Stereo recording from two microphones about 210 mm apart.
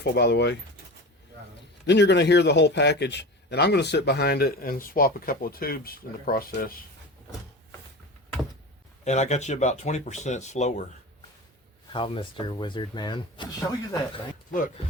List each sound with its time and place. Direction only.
0.0 s a man's voice: 55° left (ahead or behind)
1.9 s a man's voice: 55° left (ahead or behind)
9.0 s speech: 35° left (ahead or behind)
11.9 s speech: 25° left (ahead or behind)